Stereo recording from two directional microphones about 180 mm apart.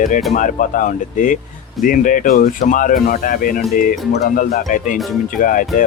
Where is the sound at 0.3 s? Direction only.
45° left (ahead or behind).